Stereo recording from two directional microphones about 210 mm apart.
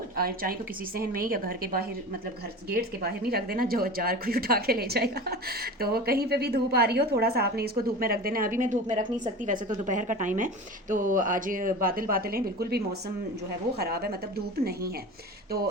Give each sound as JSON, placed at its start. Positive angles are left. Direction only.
{"t": 0.2, "sound": "a woman's voice", "side_deg": -45}